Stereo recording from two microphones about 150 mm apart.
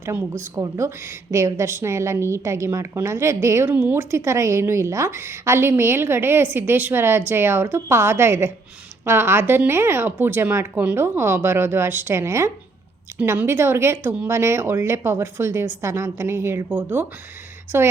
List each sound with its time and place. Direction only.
0.0 s a woman's voice: 15° right (ahead or behind)